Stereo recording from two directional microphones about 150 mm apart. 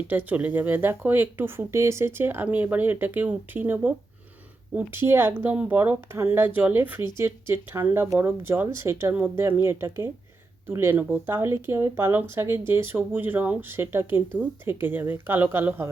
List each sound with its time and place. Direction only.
0.1 s speech: 10° right (ahead or behind)